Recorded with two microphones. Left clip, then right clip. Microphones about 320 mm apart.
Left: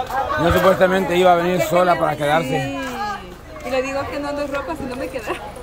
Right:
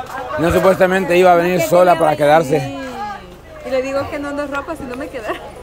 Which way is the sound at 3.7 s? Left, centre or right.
Centre.